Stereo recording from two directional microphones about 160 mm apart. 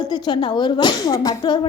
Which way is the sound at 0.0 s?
30° left (ahead or behind).